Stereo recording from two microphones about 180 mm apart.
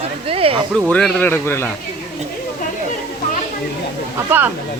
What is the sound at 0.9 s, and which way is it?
Speech, 5° left (ahead or behind).